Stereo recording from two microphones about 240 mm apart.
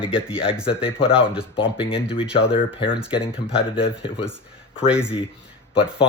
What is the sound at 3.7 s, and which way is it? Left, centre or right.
Speech, left.